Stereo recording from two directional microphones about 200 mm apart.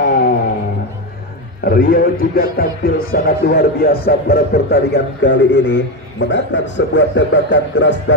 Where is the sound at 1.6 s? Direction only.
45° left (ahead or behind).